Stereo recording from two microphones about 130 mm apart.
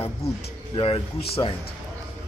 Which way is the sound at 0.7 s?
45° left (ahead or behind).